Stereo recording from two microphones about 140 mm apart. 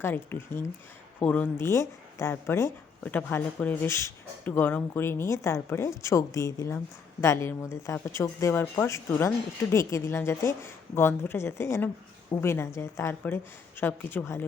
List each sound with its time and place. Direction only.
0.0 s speech: 15° left (ahead or behind)